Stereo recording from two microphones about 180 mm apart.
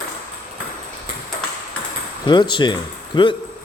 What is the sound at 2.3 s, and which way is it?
Speech, 25° left (ahead or behind).